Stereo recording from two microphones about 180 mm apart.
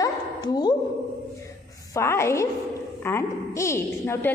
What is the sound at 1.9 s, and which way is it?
A woman's voice, 15° left (ahead or behind).